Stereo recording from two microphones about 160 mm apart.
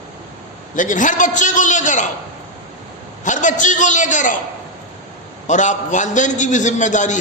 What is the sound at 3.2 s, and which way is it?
A man's voice, 50° left (ahead or behind).